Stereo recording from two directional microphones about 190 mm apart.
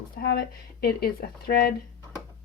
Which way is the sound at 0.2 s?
55° left (ahead or behind).